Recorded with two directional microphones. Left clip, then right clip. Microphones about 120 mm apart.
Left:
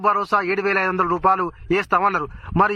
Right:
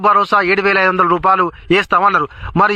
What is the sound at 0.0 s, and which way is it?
A man's voice, 25° right (ahead or behind).